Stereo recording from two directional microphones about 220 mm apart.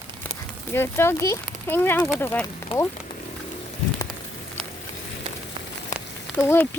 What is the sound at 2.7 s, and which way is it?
Speech, 25° left (ahead or behind).